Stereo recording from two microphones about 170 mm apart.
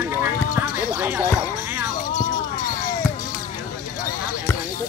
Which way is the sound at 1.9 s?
50° left (ahead or behind).